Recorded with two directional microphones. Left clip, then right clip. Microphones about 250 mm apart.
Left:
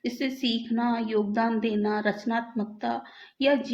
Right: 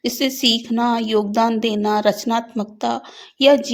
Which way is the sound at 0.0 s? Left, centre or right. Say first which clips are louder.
Right 11 dB; right.